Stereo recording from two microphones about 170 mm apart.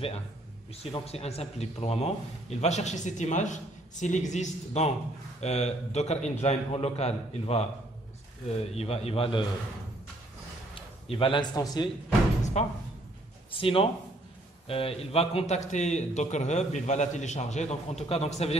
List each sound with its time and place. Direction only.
1.0 s a man's voice: 40° left (ahead or behind)
10.7 s a man's voice: 30° left (ahead or behind)
12.6 s a man's voice: 40° left (ahead or behind)